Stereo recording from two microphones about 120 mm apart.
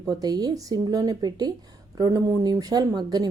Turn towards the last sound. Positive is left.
turn(degrees=-35)  # may be behind; listen again after turning